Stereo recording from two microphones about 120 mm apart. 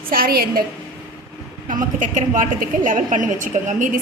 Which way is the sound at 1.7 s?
90° right.